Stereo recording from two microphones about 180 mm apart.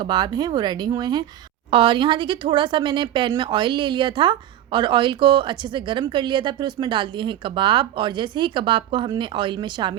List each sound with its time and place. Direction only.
0.0 s speech: 25° right (ahead or behind)